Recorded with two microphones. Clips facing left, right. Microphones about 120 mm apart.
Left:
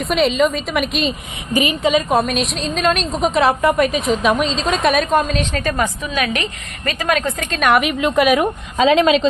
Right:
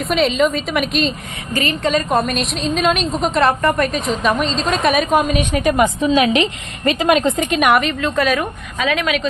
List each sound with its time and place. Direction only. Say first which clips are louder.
0.0 s a woman's voice: even; centre (ahead or behind)
1.5 s a woman's voice: left 2 dB; 15° left (ahead or behind); by 7.7 s 15° right (ahead or behind)
7.8 s a woman's voice: left 2 dB; 15° left (ahead or behind)
8.8 s speech: left 6 dB; 25° left (ahead or behind)